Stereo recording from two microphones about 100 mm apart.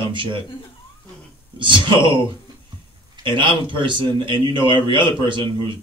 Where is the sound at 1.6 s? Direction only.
55° right (ahead or behind).